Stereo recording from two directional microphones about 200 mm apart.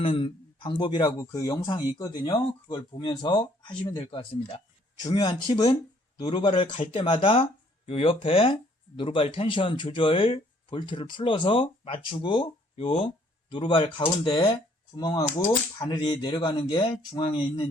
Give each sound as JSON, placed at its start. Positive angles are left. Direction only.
{"t": 0.0, "sound": "speech", "side_deg": 25}
{"t": 15.4, "sound": "speech", "side_deg": 10}
{"t": 15.9, "sound": "speech", "side_deg": 20}